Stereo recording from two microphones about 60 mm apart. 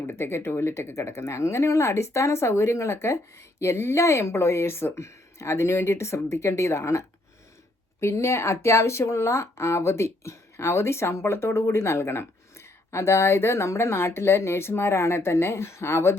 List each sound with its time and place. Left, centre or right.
0.1 s speech: left
8.0 s speech: left